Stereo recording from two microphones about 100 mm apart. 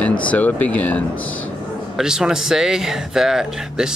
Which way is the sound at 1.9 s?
5° right (ahead or behind).